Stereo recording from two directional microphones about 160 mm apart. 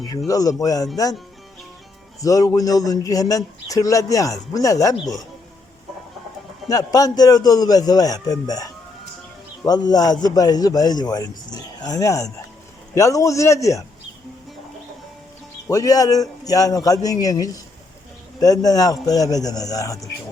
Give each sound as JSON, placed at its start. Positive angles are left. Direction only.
{"t": 0.3, "sound": "a man's voice", "side_deg": 20}
{"t": 2.2, "sound": "a man's voice", "side_deg": 20}
{"t": 6.7, "sound": "a man's voice", "side_deg": 25}
{"t": 15.7, "sound": "a man's voice", "side_deg": 20}